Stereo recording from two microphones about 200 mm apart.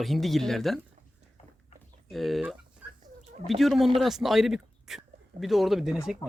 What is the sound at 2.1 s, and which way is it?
Chicken, centre (ahead or behind).